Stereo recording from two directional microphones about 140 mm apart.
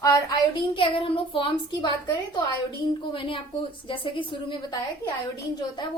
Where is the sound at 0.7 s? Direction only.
40° left (ahead or behind).